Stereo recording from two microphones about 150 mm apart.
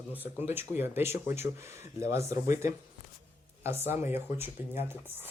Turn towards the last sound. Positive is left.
turn(degrees=-15)  # may be behind; listen again after turning